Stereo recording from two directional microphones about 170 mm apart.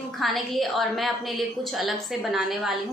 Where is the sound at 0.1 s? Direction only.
Centre (ahead or behind).